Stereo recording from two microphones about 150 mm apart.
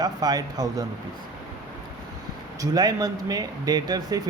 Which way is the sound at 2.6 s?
25° right (ahead or behind).